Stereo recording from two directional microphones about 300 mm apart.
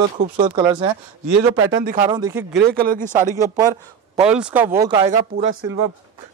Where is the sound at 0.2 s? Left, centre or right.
Right.